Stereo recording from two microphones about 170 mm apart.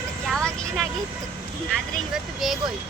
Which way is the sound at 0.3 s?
Centre (ahead or behind).